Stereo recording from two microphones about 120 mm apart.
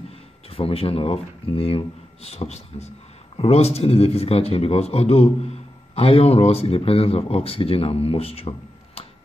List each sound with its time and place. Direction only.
0.5 s a man's voice: 50° left (ahead or behind)